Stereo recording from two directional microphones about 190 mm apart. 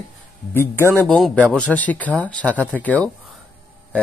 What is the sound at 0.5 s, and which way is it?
Speech, 10° left (ahead or behind).